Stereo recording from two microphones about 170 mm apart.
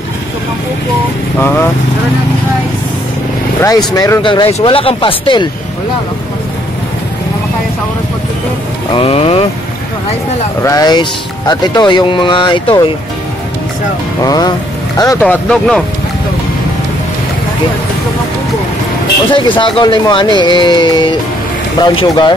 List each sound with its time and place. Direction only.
3.6 s speech: 20° left (ahead or behind)
8.9 s speech: 35° left (ahead or behind)
10.6 s speech: 20° left (ahead or behind)
14.2 s speech: 20° left (ahead or behind)
15.2 s speech: 5° left (ahead or behind)
19.3 s speech: 30° left (ahead or behind)